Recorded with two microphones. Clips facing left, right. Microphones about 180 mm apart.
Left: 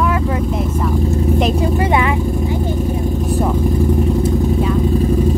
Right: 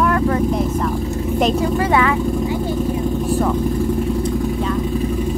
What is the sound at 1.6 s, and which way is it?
Vehicle, 20° left (ahead or behind).